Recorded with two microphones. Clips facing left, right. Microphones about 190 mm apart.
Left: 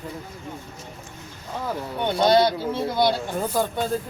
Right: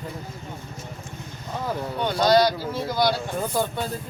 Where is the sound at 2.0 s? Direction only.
25° left (ahead or behind).